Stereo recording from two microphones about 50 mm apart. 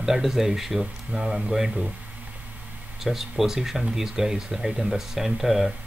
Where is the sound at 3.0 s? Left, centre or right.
Centre.